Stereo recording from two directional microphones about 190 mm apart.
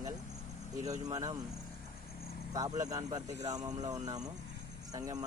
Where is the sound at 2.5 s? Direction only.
20° right (ahead or behind).